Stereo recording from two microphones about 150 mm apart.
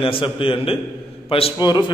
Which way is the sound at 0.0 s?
35° left (ahead or behind).